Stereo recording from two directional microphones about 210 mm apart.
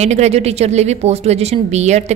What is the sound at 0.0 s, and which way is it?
A woman's voice, 30° right (ahead or behind).